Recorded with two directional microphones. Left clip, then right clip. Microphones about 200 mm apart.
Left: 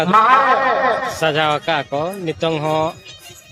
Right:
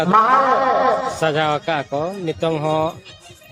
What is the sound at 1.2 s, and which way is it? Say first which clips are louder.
Speech: left 2 dB; 5° right (ahead or behind).